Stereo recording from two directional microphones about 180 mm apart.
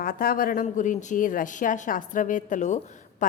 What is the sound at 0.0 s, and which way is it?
A woman's voice, 55° left (ahead or behind).